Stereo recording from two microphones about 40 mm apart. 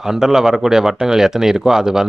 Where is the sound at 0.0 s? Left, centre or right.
Centre.